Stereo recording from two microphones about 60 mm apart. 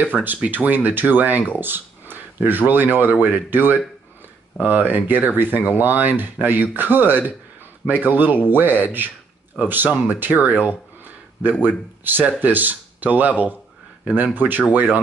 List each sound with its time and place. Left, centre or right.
0.0 s speech: right